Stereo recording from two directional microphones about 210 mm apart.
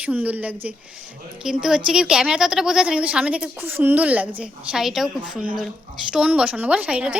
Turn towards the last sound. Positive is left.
turn(degrees=-5)  # may be behind; listen again after turning